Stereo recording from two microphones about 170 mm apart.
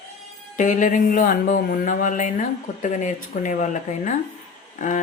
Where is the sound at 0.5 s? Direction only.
45° left (ahead or behind).